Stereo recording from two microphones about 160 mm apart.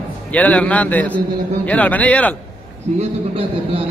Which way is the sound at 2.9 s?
35° right (ahead or behind).